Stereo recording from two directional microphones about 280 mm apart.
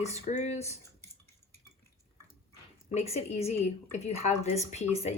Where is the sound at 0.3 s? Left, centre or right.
Left.